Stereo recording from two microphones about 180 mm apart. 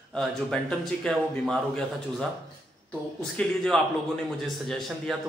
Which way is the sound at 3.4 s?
5° left (ahead or behind).